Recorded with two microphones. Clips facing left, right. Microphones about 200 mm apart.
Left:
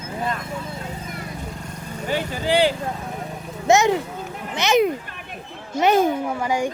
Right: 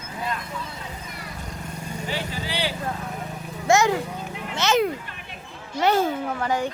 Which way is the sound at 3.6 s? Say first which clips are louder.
Left 3 dB; 20° left (ahead or behind).